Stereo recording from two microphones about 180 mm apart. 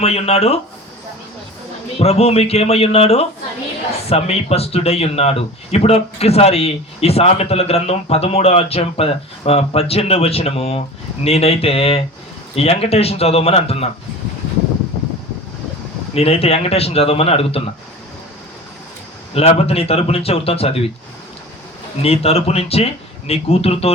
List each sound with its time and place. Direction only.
0.0 s speech: 35° left (ahead or behind)
2.0 s speech: 35° left (ahead or behind)
16.1 s speech: 35° left (ahead or behind)
19.3 s speech: 35° left (ahead or behind)
22.0 s speech: 35° left (ahead or behind)